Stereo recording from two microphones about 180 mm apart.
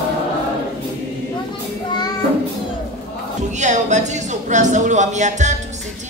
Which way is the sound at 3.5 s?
40° right (ahead or behind).